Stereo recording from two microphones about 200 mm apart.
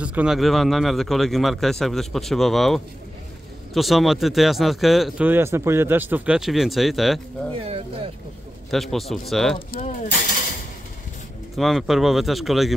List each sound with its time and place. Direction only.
0.0 s speech: 5° right (ahead or behind)
7.5 s speech: 30° right (ahead or behind)
8.6 s speech: centre (ahead or behind)
9.7 s speech: 40° left (ahead or behind)
11.5 s speech: centre (ahead or behind)